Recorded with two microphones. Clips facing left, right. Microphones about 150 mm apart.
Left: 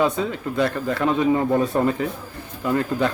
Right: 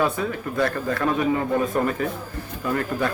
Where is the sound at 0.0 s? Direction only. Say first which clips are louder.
Left 2 dB; 20° left (ahead or behind).